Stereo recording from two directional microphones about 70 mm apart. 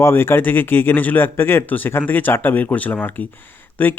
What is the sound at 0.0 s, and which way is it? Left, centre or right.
Speech, left.